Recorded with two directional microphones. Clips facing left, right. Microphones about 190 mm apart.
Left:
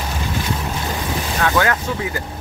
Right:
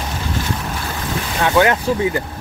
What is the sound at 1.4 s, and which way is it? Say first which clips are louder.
Speech: right 4 dB; 20° right (ahead or behind).